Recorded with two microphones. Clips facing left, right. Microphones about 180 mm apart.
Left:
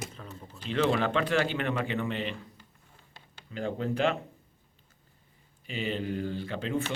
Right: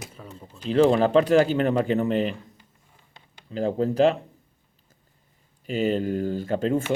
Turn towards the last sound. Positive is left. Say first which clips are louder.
# right 8 dB
turn(degrees=-45)  # may be behind; listen again after turning